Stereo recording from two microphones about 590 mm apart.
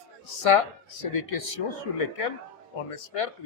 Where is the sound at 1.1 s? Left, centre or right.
Left.